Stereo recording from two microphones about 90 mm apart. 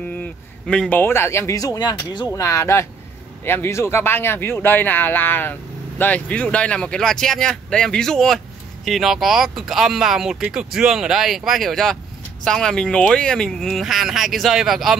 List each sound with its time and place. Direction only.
0.1 s speech: 15° left (ahead or behind); by 1.8 s 40° left (ahead or behind)
1.8 s speech: 55° left (ahead or behind)
2.3 s speech: 35° left (ahead or behind); by 15.0 s 5° right (ahead or behind)